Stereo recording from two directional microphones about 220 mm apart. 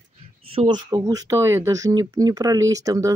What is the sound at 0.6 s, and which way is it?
Speech, 20° right (ahead or behind).